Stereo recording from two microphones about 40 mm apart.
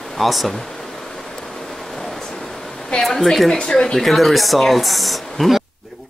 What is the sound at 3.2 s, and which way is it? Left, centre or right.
Speech, centre.